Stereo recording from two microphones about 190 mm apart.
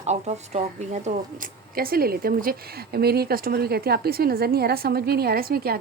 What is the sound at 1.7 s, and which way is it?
Speech, 50° right (ahead or behind).